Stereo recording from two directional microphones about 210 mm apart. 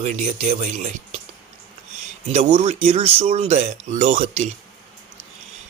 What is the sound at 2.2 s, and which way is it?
Speech, 30° right (ahead or behind).